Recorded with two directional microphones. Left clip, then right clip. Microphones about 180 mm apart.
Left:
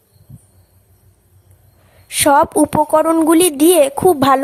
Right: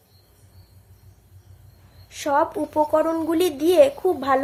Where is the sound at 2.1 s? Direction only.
55° left (ahead or behind).